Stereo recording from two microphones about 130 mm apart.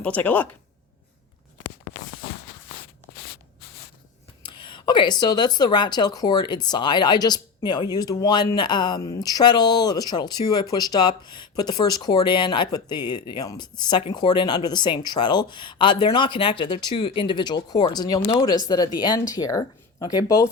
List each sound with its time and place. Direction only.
0.0 s speech: 10° left (ahead or behind)
4.4 s speech: 35° left (ahead or behind)